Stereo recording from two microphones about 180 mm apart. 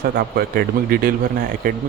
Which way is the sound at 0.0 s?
60° right (ahead or behind).